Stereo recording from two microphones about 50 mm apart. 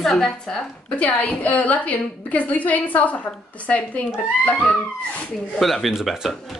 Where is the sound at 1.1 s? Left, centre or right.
Left.